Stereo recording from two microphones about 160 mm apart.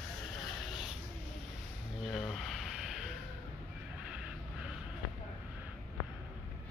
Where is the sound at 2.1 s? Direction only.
Centre (ahead or behind).